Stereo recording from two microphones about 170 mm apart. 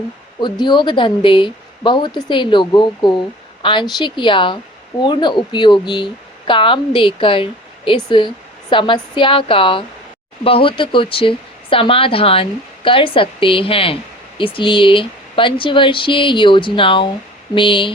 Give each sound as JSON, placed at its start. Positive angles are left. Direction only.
{"t": 0.6, "sound": "a woman's voice", "side_deg": 25}